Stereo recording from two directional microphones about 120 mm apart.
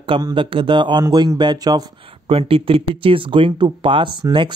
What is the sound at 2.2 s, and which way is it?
Speech, 50° right (ahead or behind).